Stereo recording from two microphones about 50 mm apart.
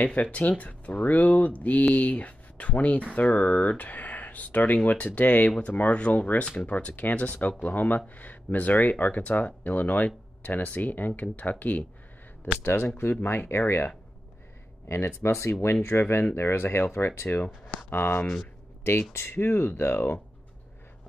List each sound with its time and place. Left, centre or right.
0.0 s speech: left
12.6 s speech: left
14.9 s speech: left
17.8 s speech: left
18.2 s speech: centre
19.3 s speech: left